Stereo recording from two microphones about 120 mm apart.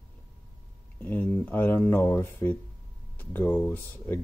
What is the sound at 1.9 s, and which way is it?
Speech, 15° left (ahead or behind).